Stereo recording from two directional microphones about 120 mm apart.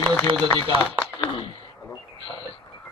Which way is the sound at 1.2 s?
45° left (ahead or behind).